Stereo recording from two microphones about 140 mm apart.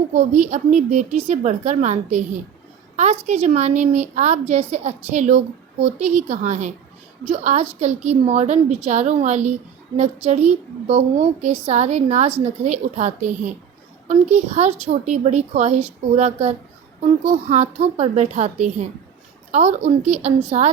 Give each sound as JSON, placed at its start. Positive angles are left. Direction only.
{"t": 0.1, "sound": "a woman's voice", "side_deg": -50}